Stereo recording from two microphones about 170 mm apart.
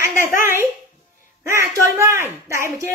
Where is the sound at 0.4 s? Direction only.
15° right (ahead or behind).